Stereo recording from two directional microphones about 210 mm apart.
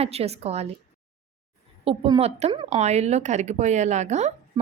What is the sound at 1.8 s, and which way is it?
A woman's voice, 25° right (ahead or behind).